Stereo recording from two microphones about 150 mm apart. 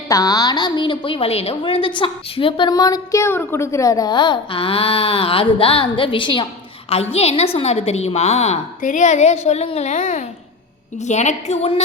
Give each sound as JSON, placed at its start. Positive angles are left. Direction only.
{"t": 0.1, "sound": "a woman's voice", "side_deg": 25}
{"t": 6.9, "sound": "a woman's voice", "side_deg": 45}